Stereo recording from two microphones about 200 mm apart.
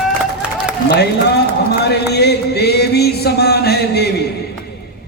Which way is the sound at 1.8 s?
55° left (ahead or behind).